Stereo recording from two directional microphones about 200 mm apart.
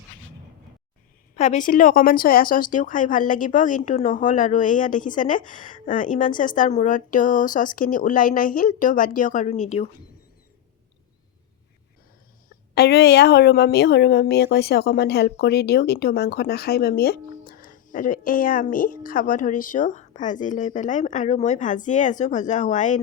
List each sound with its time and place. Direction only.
1.4 s speech: 35° left (ahead or behind)
12.7 s speech: 55° left (ahead or behind); by 23.0 s 40° left (ahead or behind)